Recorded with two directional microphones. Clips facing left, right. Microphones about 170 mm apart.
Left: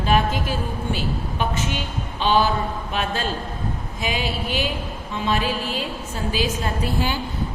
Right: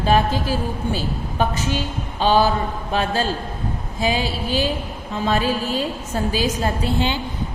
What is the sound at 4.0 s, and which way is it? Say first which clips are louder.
A woman's voice: right 5 dB; 35° right (ahead or behind).